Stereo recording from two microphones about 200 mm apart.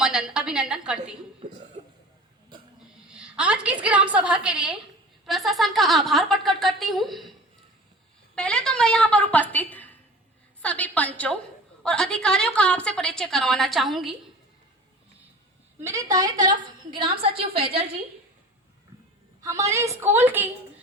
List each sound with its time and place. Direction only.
0.0 s a sound: 5° right (ahead or behind)
3.2 s a sound: 5° right (ahead or behind)
3.8 s a woman's voice: 5° right (ahead or behind)
8.4 s a woman's voice: 5° left (ahead or behind)
15.8 s a woman's voice: 15° right (ahead or behind)
19.4 s a woman's voice: 15° right (ahead or behind)